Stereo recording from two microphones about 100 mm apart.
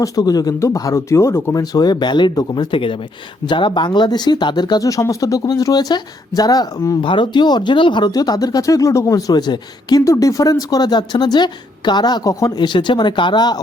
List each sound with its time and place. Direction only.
0.0 s speech: 40° left (ahead or behind)
7.0 s speech: 50° left (ahead or behind)
10.0 s speech: 30° left (ahead or behind)